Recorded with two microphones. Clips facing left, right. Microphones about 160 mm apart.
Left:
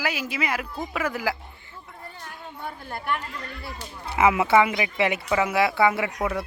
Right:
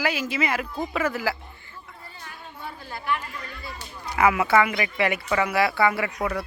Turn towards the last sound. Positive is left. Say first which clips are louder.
# left 1 dB
turn(degrees=0)  # may be behind; listen again after turning